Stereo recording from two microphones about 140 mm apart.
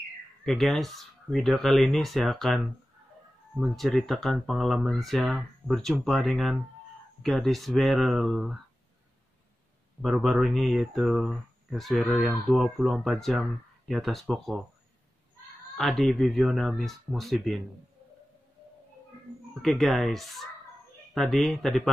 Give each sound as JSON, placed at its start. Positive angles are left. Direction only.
{"t": 0.5, "sound": "speech", "side_deg": 0}
{"t": 10.0, "sound": "speech", "side_deg": 0}
{"t": 15.8, "sound": "speech", "side_deg": 0}
{"t": 19.5, "sound": "speech", "side_deg": 0}